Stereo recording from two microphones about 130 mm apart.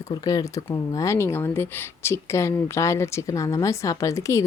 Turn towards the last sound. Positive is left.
turn(degrees=25)  # may be behind; listen again after turning